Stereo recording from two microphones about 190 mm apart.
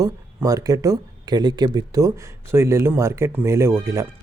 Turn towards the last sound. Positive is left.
turn(degrees=-15)  # may be behind; listen again after turning